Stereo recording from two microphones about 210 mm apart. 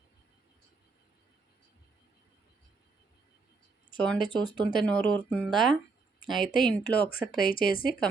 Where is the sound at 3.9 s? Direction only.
5° left (ahead or behind).